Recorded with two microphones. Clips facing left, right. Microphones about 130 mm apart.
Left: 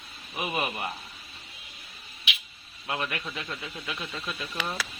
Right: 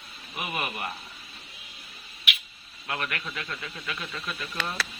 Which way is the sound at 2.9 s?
20° left (ahead or behind).